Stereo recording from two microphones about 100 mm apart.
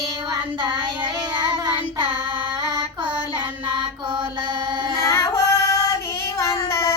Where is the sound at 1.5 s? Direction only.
50° right (ahead or behind).